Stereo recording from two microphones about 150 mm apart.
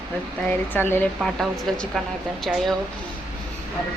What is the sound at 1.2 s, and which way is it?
A woman's voice, centre (ahead or behind).